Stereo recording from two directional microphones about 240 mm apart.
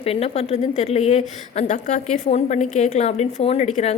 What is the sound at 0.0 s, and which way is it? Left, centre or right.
A woman's voice, left.